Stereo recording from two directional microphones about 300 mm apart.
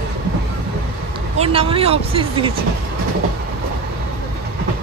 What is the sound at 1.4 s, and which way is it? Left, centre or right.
Speech, centre.